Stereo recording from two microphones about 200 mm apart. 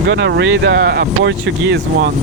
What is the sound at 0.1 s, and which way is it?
Speech, 60° right (ahead or behind).